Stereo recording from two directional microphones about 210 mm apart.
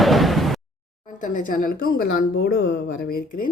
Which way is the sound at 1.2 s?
40° left (ahead or behind).